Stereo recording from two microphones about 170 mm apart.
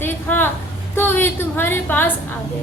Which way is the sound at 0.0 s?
10° left (ahead or behind).